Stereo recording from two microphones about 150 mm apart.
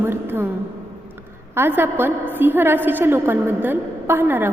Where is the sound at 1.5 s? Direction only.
15° right (ahead or behind).